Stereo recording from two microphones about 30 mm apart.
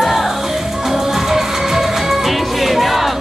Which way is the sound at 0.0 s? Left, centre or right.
Centre.